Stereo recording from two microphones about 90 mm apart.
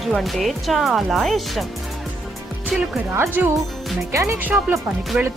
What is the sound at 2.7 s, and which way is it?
Speech, 10° right (ahead or behind).